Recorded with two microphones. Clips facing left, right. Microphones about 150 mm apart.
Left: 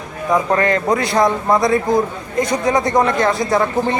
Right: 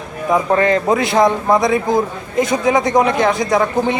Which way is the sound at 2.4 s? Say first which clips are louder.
Right 2 dB; 25° right (ahead or behind).